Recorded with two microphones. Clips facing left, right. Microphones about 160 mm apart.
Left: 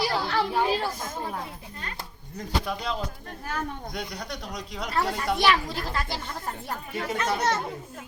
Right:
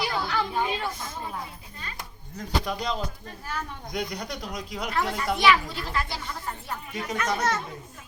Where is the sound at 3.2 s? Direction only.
55° left (ahead or behind).